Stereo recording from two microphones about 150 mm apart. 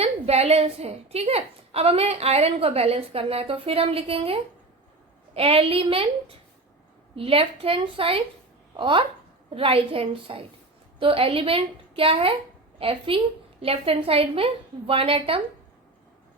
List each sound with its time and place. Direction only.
0.0 s a woman's voice: 45° right (ahead or behind)